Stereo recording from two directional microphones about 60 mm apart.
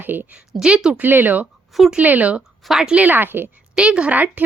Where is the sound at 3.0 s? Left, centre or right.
Right.